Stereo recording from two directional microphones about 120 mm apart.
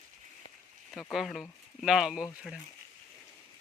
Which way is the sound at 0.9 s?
Centre (ahead or behind).